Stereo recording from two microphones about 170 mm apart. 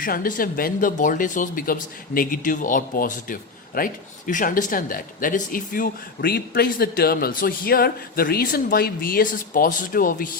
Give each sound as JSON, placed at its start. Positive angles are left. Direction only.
{"t": 0.0, "sound": "speech", "side_deg": 55}